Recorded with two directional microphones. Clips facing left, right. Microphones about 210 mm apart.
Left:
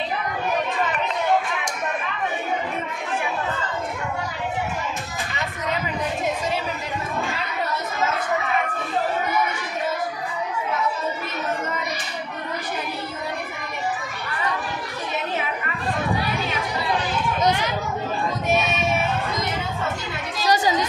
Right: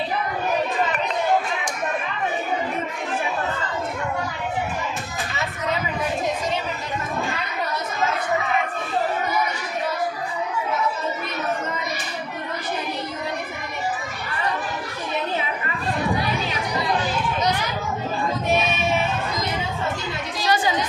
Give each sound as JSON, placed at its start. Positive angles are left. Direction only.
{"t": 20.4, "sound": "music", "side_deg": 40}